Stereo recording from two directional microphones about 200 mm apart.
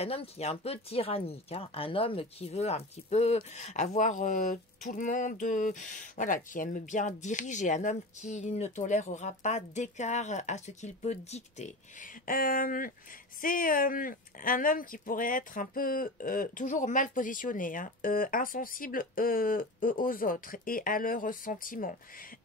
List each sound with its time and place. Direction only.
0.0 s speech: 30° left (ahead or behind)